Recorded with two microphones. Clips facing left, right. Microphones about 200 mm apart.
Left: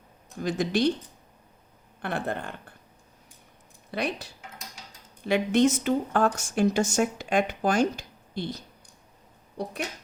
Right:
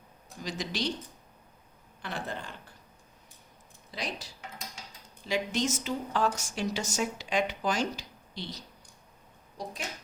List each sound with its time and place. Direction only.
0.3 s speech: 55° left (ahead or behind)
2.0 s speech: 55° left (ahead or behind)
3.9 s speech: 60° left (ahead or behind)